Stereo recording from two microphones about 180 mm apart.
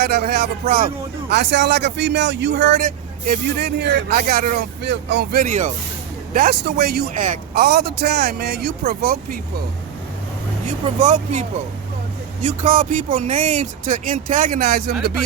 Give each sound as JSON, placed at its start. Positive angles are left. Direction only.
{"t": 0.0, "sound": "a man's voice", "side_deg": -60}
{"t": 2.7, "sound": "speech", "side_deg": -50}
{"t": 6.3, "sound": "speech", "side_deg": -60}
{"t": 7.1, "sound": "speech", "side_deg": -45}
{"t": 10.7, "sound": "speech", "side_deg": -45}